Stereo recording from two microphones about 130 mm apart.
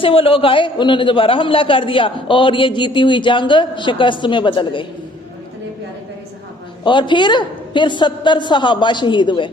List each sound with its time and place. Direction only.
0.0 s a man's voice: 45° left (ahead or behind)
6.8 s a man's voice: 40° left (ahead or behind)